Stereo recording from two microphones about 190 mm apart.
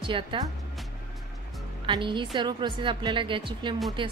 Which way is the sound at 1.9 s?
25° right (ahead or behind).